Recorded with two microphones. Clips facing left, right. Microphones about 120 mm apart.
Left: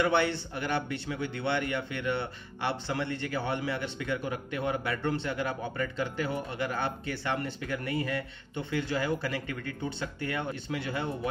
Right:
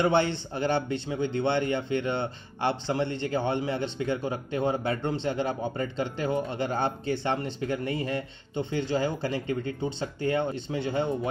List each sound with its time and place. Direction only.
0.0 s speech: 30° right (ahead or behind)